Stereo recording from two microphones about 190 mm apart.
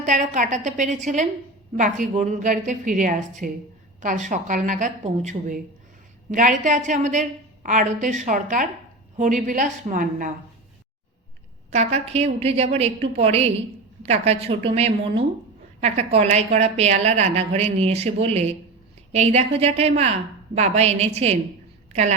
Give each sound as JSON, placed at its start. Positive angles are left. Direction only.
{"t": 0.0, "sound": "a woman's voice", "side_deg": -40}
{"t": 11.7, "sound": "a woman's voice", "side_deg": -35}